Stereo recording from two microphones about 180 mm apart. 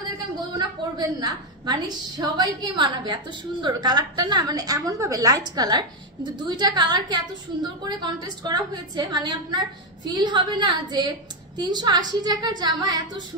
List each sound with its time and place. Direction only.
0.9 s a woman's voice: 20° right (ahead or behind)